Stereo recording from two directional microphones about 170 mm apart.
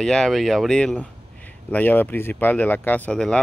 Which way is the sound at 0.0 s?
5° left (ahead or behind).